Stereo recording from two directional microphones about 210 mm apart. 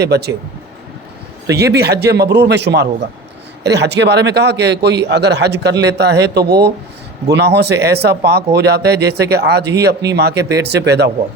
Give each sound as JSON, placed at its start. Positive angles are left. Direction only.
{"t": 0.0, "sound": "a man's voice", "side_deg": -50}
{"t": 1.5, "sound": "a man's voice", "side_deg": -50}